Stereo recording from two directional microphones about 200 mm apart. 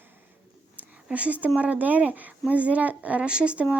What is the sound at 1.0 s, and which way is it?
Speech, 5° right (ahead or behind).